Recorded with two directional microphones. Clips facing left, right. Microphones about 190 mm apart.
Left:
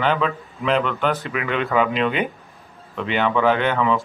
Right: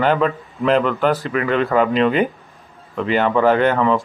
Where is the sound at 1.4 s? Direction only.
40° right (ahead or behind).